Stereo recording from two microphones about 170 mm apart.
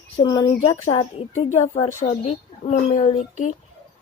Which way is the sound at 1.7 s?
35° left (ahead or behind).